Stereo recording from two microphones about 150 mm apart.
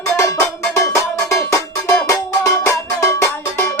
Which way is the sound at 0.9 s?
20° left (ahead or behind).